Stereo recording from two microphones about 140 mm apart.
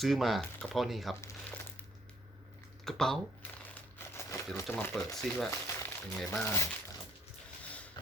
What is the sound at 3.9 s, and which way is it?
Crumpling, 20° left (ahead or behind).